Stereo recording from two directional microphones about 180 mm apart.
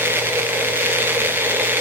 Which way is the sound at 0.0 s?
10° right (ahead or behind).